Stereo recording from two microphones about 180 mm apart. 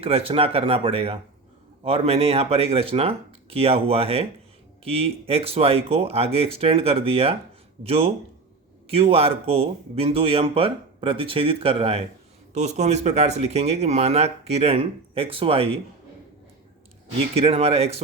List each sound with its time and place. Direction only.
0.0 s speech: 30° right (ahead or behind)
17.3 s speech: 35° right (ahead or behind)